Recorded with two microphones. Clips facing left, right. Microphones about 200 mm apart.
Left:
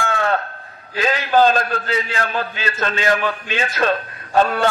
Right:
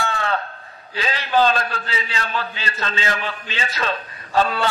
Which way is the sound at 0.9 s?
50° left (ahead or behind).